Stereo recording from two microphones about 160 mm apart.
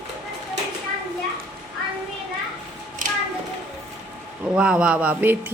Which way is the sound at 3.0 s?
55° right (ahead or behind).